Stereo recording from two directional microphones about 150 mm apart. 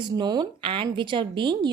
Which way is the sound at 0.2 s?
30° right (ahead or behind).